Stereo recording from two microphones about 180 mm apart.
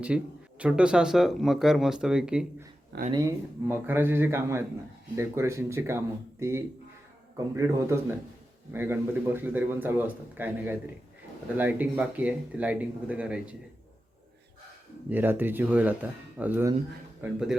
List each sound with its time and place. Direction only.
0.1 s speech: 5° right (ahead or behind)
3.1 s a man's voice: 20° right (ahead or behind)
15.1 s a man's voice: 10° right (ahead or behind)